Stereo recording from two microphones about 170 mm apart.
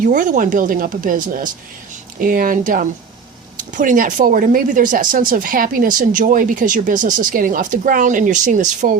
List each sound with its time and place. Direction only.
0.0 s speech: 50° right (ahead or behind)